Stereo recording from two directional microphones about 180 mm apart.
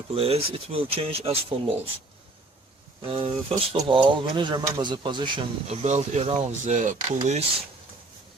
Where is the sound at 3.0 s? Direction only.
30° right (ahead or behind).